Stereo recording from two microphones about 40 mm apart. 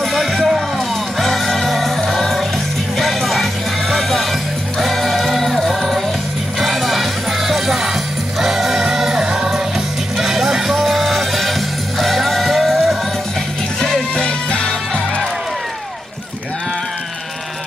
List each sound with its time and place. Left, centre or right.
0.0 s music: centre
3.0 s music: centre
13.7 s music: centre